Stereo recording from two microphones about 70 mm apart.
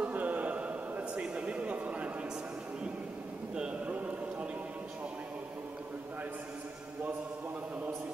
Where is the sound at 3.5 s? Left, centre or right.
Centre.